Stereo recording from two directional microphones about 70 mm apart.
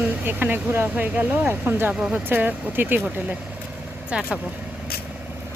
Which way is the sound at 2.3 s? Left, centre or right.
Right.